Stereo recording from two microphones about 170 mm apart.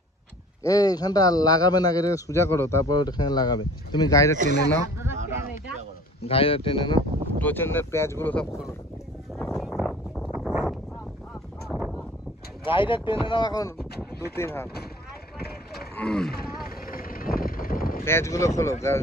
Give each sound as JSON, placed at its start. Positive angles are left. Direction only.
{"t": 0.7, "sound": "a man's voice", "side_deg": 20}
{"t": 4.5, "sound": "speech", "side_deg": 80}
{"t": 4.9, "sound": "a sound", "side_deg": -15}
{"t": 6.2, "sound": "speech", "side_deg": 35}
{"t": 7.3, "sound": "speech", "side_deg": 10}
{"t": 9.5, "sound": "a sound", "side_deg": 0}
{"t": 12.6, "sound": "a man's voice", "side_deg": 30}
{"t": 13.7, "sound": "speech", "side_deg": 65}
{"t": 14.3, "sound": "speech", "side_deg": 15}
{"t": 15.3, "sound": "vehicle", "side_deg": 65}
{"t": 16.0, "sound": "speech", "side_deg": 5}
{"t": 16.6, "sound": "vehicle", "side_deg": 60}
{"t": 18.0, "sound": "speech", "side_deg": 15}